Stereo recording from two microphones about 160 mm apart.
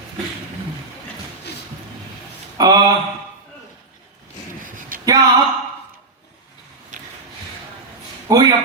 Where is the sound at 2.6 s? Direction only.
25° right (ahead or behind).